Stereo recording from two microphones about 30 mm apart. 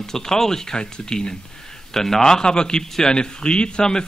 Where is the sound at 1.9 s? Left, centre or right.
Centre.